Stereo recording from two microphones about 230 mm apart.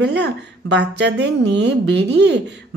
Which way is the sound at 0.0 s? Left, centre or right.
Right.